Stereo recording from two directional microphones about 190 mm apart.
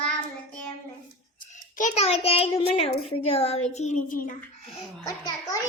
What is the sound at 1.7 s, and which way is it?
A child's voice, 40° left (ahead or behind).